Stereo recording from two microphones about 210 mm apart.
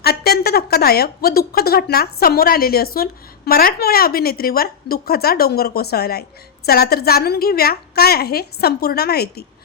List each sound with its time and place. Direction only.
0.0 s a woman's voice: 50° left (ahead or behind)